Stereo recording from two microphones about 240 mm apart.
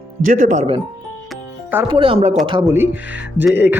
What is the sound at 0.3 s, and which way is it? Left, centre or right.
Speech, right.